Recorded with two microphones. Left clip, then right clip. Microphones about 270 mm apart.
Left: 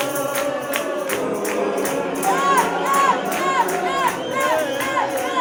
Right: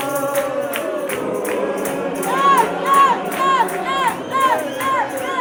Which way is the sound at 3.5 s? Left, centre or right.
Centre.